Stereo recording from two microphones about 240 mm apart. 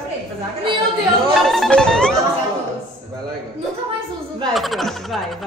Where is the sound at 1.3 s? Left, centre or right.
Centre.